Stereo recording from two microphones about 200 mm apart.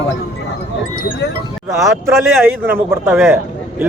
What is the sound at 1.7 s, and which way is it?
Speech, 15° right (ahead or behind).